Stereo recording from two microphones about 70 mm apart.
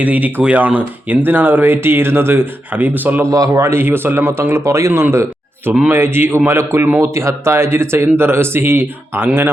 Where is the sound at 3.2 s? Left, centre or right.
Right.